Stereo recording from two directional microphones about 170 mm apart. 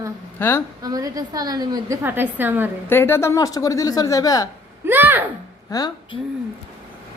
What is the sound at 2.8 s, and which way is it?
A woman's voice, 15° left (ahead or behind).